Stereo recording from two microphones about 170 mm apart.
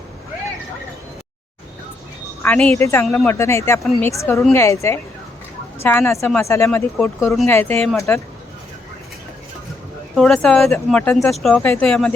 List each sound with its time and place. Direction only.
2.4 s speech: 10° left (ahead or behind)
10.2 s speech: centre (ahead or behind)